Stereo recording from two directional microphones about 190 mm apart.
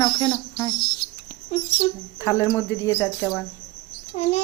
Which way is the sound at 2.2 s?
15° left (ahead or behind).